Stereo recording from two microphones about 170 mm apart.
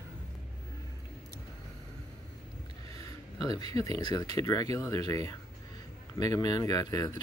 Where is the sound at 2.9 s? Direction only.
20° left (ahead or behind).